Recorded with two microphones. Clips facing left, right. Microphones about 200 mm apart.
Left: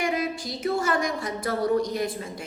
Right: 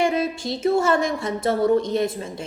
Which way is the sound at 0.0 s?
25° right (ahead or behind).